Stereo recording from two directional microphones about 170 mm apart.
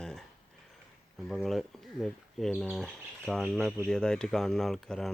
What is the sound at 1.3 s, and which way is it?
Speech, centre (ahead or behind).